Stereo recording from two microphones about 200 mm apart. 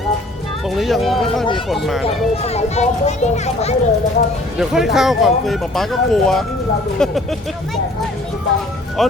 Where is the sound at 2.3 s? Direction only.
30° left (ahead or behind).